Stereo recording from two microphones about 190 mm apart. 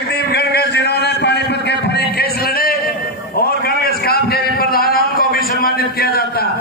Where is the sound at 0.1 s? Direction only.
55° left (ahead or behind).